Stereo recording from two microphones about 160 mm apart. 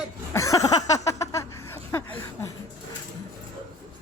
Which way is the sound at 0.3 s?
20° left (ahead or behind).